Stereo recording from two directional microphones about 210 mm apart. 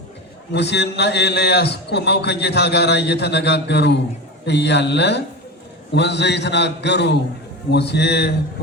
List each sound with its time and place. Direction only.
0.5 s a man's voice: 55° left (ahead or behind)